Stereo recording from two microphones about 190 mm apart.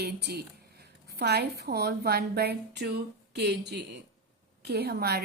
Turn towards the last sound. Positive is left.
turn(degrees=-55)  # may be behind; listen again after turning